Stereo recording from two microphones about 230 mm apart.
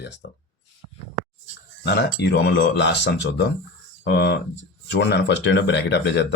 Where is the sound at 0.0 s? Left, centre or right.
Left.